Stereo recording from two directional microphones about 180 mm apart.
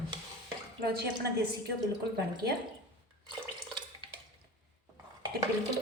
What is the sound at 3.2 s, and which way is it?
Drip, 25° right (ahead or behind).